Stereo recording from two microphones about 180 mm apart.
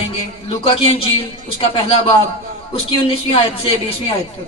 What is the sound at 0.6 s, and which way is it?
A man's voice, 30° left (ahead or behind).